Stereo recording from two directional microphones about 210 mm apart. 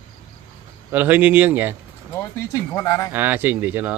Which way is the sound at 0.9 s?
10° right (ahead or behind).